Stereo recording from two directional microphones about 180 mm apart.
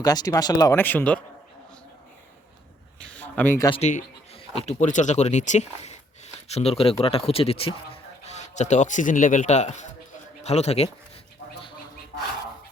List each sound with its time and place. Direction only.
0.0 s speech: 20° left (ahead or behind)
3.0 s a sound: 5° left (ahead or behind)
3.7 s a man's voice: 40° left (ahead or behind)